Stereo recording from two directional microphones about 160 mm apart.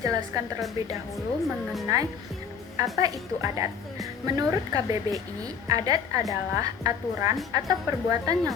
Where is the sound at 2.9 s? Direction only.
20° right (ahead or behind).